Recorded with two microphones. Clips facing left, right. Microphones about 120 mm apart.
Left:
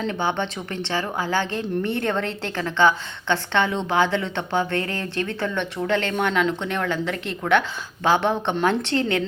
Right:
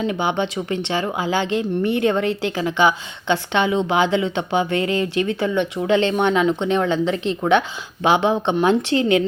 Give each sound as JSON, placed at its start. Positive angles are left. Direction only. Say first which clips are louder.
{"t": 0.0, "sound": "speech", "louder": "right 3 dB", "side_deg": -15}